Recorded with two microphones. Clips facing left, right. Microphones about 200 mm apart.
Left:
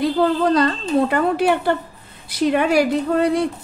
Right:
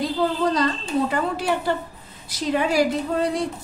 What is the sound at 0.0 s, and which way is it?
Speech, 60° left (ahead or behind).